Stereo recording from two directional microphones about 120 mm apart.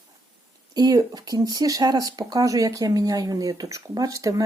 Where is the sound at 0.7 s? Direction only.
35° right (ahead or behind).